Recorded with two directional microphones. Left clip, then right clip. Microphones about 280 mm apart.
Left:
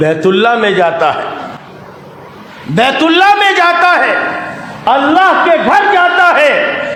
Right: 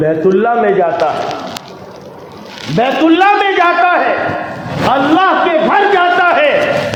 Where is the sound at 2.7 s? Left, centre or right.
Left.